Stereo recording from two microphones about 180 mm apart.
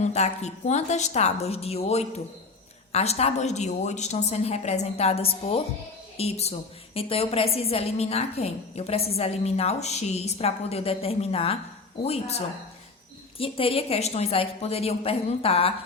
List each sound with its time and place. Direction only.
0.0 s a woman's voice: 35° left (ahead or behind)
13.4 s a woman's voice: 30° left (ahead or behind)